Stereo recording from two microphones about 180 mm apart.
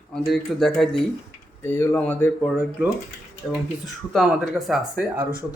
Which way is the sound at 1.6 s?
10° left (ahead or behind).